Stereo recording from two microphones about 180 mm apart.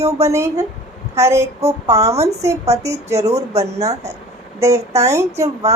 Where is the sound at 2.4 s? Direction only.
15° right (ahead or behind).